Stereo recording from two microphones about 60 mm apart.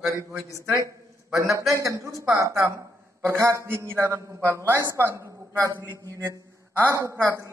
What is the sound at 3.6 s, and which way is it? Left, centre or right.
Speech, right.